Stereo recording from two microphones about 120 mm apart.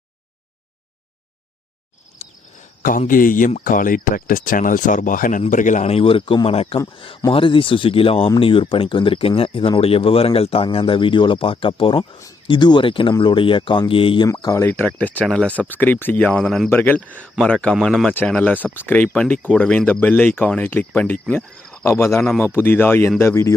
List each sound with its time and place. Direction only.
2.2 s cricket: 70° left (ahead or behind)
2.8 s speech: 90° left; by 14.3 s 45° left (ahead or behind)
14.5 s speech: 15° left (ahead or behind); by 18.1 s centre (ahead or behind)
18.3 s speech: 15° left (ahead or behind)
22.2 s speech: 10° left (ahead or behind)